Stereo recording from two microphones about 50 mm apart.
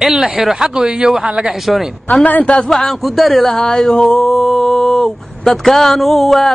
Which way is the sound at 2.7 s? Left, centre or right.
Centre.